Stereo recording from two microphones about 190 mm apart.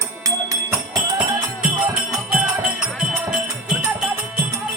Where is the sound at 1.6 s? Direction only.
5° right (ahead or behind).